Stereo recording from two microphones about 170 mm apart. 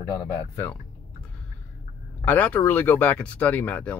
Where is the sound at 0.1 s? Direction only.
20° left (ahead or behind).